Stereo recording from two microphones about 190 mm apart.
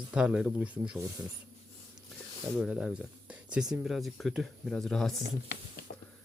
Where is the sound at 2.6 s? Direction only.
5° right (ahead or behind).